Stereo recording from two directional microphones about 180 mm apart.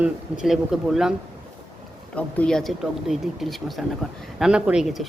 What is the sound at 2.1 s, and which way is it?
Speech, 5° left (ahead or behind).